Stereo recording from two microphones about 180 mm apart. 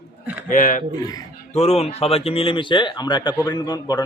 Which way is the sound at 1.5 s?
35° left (ahead or behind).